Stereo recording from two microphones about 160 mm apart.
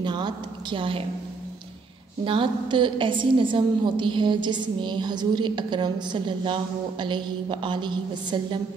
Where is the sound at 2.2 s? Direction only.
30° right (ahead or behind).